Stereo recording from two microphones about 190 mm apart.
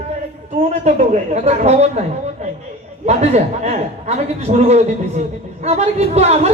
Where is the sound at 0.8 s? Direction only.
35° right (ahead or behind).